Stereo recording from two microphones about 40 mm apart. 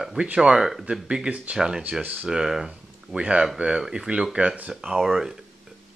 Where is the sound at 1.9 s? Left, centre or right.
Centre.